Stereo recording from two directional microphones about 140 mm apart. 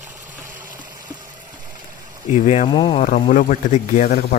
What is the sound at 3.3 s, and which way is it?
Speech, 70° left (ahead or behind).